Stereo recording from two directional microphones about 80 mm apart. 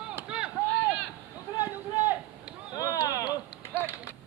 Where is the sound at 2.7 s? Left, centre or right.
Left.